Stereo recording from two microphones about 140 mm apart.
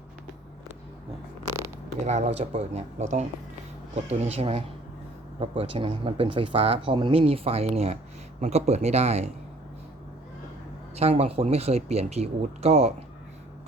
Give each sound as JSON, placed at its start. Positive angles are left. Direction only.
{"t": 1.5, "sound": "zipper", "side_deg": -20}
{"t": 2.0, "sound": "speech", "side_deg": -55}
{"t": 10.9, "sound": "speech", "side_deg": -45}